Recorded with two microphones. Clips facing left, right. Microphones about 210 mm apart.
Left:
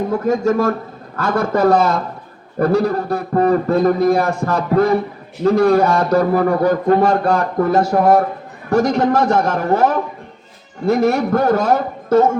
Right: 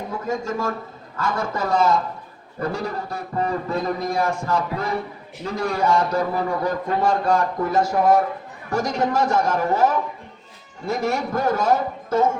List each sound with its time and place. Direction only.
0.1 s a man's voice: 70° left (ahead or behind)